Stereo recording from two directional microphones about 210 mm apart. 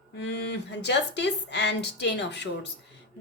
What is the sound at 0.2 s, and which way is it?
Speech, 55° left (ahead or behind).